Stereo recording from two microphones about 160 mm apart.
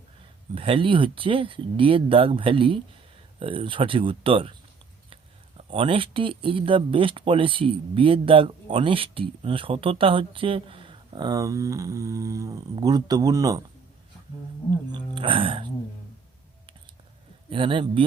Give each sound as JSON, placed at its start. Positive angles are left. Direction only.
{"t": 0.5, "sound": "speech", "side_deg": -35}
{"t": 5.5, "sound": "speech", "side_deg": -35}
{"t": 14.9, "sound": "speech", "side_deg": -30}
{"t": 17.5, "sound": "speech", "side_deg": -30}